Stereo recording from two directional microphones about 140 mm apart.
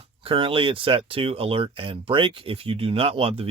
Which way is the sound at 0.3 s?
40° right (ahead or behind).